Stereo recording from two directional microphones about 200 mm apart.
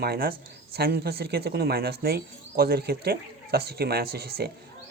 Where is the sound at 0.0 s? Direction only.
50° right (ahead or behind).